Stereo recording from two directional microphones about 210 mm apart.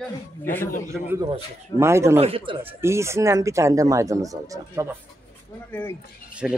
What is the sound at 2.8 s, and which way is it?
Speech, 15° right (ahead or behind).